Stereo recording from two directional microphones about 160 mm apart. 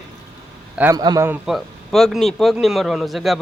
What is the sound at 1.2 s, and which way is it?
Speech, 10° right (ahead or behind).